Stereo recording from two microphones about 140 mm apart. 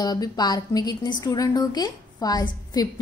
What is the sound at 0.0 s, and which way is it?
A woman's voice, 30° left (ahead or behind).